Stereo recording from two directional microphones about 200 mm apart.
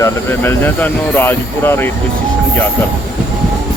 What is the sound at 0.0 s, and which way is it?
Speech, 10° left (ahead or behind).